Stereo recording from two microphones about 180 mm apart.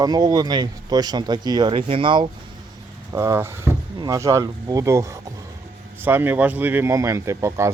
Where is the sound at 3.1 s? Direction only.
15° right (ahead or behind).